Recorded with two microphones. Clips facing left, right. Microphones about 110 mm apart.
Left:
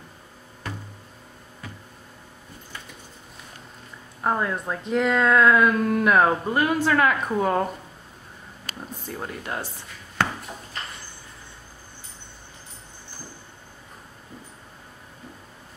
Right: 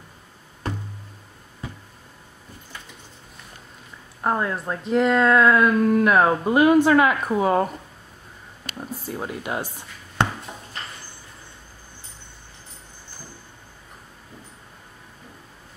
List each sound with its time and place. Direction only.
4.2 s speech: centre (ahead or behind)
6.4 s speech: 15° right (ahead or behind)
7.0 s speech: 5° right (ahead or behind)
9.0 s a sound: 5° right (ahead or behind)